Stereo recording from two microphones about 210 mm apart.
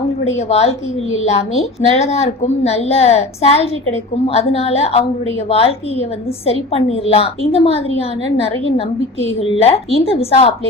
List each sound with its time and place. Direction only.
0.3 s a woman's voice: 30° left (ahead or behind)
9.5 s a woman's voice: 30° left (ahead or behind)